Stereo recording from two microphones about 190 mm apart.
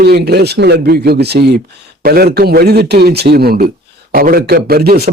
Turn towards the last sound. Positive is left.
turn(degrees=-55)  # may be behind; listen again after turning